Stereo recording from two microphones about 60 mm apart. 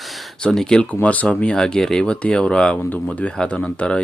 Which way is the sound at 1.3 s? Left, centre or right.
Centre.